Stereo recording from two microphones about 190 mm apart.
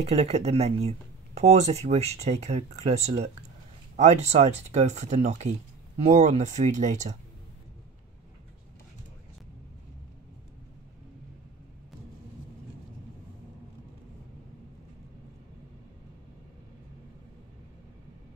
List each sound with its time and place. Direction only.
0.0 s speech: 35° right (ahead or behind)